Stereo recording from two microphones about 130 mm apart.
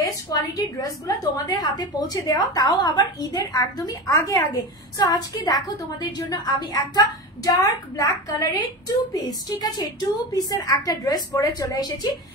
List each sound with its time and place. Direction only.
0.6 s a woman's voice: 25° left (ahead or behind)